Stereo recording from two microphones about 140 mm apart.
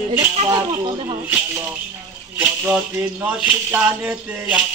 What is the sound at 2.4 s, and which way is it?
Music, 10° right (ahead or behind).